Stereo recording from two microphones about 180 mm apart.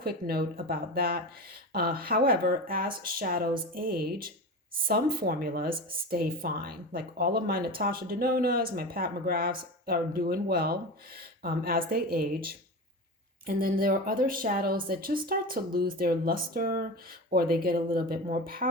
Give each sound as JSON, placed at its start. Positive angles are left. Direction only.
{"t": 0.0, "sound": "a woman's voice", "side_deg": -60}